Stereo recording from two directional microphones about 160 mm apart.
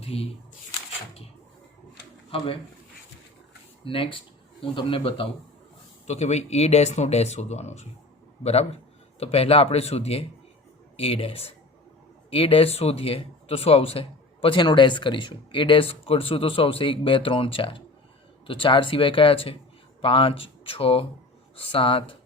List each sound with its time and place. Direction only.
0.0 s speech: 40° left (ahead or behind)
3.8 s speech: 35° left (ahead or behind)
9.1 s speech: 40° left (ahead or behind)